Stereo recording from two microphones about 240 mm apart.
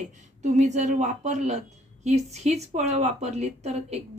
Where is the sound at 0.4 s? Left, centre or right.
Right.